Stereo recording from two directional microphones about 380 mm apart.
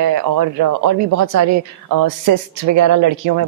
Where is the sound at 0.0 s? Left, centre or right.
Right.